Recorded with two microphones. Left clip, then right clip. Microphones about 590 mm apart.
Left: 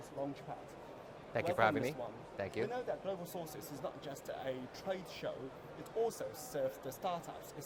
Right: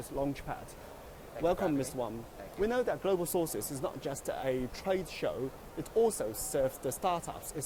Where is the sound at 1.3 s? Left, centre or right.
Left.